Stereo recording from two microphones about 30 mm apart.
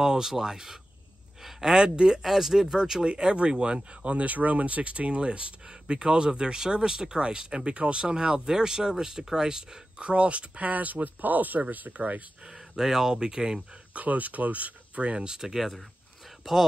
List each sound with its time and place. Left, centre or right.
0.0 s speech: centre
2.2 s speech: centre
3.0 s speech: right
4.0 s speech: right
9.9 s speech: right
10.6 s speech: right
12.5 s speech: centre
13.1 s speech: right
13.9 s speech: right
15.1 s speech: right
15.4 s speech: centre